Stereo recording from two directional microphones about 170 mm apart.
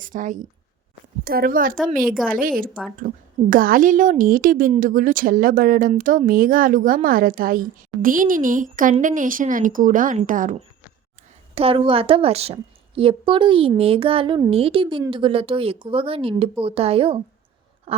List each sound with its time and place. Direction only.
0.0 s speech: 50° right (ahead or behind)
1.2 s a woman's voice: 60° right (ahead or behind)
11.5 s a woman's voice: 35° right (ahead or behind)
17.9 s a sound: 35° right (ahead or behind)